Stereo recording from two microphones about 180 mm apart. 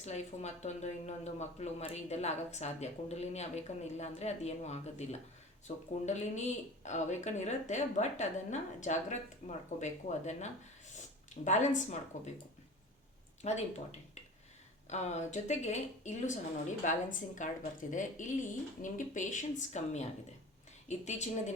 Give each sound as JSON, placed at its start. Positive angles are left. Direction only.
{"t": 0.0, "sound": "speech", "side_deg": 40}
{"t": 13.4, "sound": "speech", "side_deg": 40}
{"t": 14.8, "sound": "a woman's voice", "side_deg": 40}